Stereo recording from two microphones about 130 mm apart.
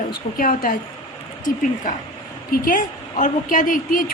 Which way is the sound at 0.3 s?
90° left.